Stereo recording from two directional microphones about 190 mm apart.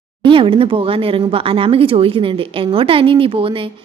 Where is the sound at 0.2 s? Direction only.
25° right (ahead or behind).